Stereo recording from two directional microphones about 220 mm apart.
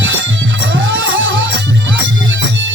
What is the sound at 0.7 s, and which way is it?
Music, 55° right (ahead or behind).